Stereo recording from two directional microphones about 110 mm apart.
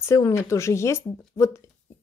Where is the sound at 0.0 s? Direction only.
25° left (ahead or behind).